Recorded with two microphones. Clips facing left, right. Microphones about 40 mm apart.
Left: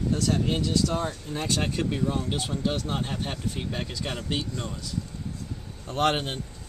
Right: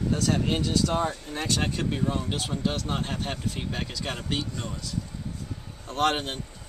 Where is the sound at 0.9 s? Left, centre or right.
Centre.